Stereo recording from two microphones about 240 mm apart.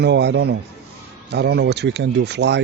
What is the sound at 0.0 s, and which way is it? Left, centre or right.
Speech, right.